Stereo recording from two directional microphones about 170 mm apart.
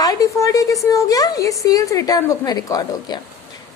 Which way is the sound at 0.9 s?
20° left (ahead or behind).